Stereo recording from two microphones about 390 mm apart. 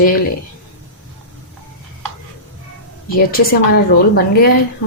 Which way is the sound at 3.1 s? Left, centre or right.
Left.